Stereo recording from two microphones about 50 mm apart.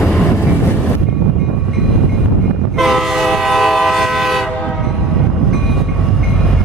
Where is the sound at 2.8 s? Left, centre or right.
Centre.